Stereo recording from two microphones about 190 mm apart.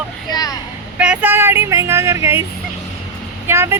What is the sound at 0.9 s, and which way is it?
Speech, 5° right (ahead or behind).